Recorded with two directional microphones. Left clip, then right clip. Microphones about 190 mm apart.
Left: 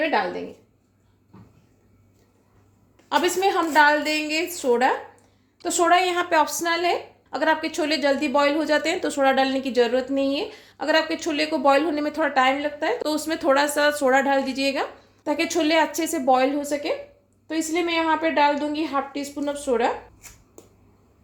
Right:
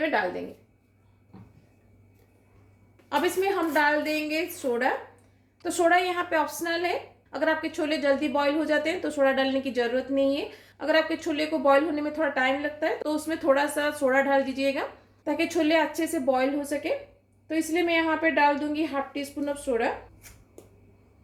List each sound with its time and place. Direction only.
3.1 s a woman's voice: 45° left (ahead or behind)